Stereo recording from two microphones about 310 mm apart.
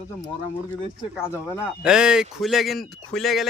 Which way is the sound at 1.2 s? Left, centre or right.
Centre.